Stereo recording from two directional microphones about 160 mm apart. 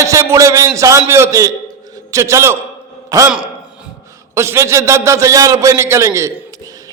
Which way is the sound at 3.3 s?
5° right (ahead or behind).